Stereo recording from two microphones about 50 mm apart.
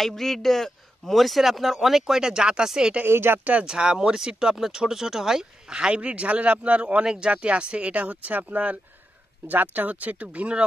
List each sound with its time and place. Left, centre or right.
0.0 s a man's voice: centre
3.1 s speech: right
3.6 s speech: centre